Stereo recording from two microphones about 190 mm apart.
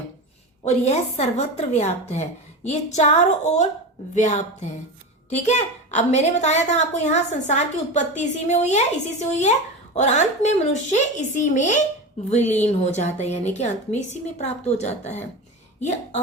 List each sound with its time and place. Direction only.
0.6 s a woman's voice: 35° left (ahead or behind)